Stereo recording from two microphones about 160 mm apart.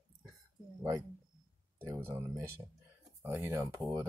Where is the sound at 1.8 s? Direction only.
15° right (ahead or behind).